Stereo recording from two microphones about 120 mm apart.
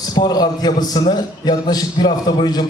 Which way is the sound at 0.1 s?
35° left (ahead or behind).